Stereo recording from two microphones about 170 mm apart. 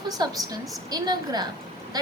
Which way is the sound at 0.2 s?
20° right (ahead or behind).